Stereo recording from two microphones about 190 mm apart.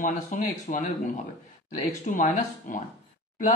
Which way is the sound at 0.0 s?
40° left (ahead or behind).